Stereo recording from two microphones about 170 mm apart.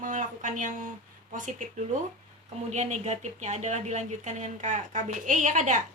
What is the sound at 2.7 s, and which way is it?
Speech, 45° right (ahead or behind).